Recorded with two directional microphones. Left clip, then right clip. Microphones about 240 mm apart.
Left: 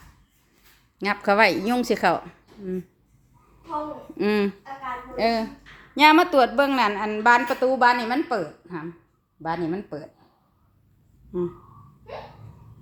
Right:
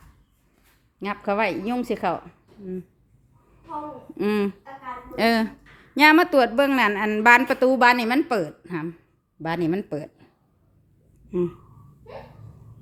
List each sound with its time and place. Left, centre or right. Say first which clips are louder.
0.9 s a woman's voice: left 5 dB; centre
4.2 s a woman's voice: left 1 dB; centre
5.1 s a woman's voice: right 2 dB; right
5.9 s a woman's voice: even; centre; by 10.1 s right
11.3 s speech: right 2 dB; right